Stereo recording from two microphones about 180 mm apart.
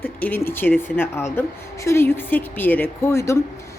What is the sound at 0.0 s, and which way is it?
A woman's voice, 10° left (ahead or behind).